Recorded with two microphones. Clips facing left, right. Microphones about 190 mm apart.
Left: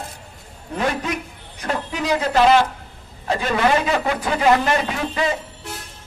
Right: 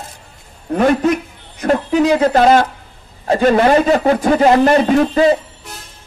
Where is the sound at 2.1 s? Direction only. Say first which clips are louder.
Right 2 dB; 45° right (ahead or behind).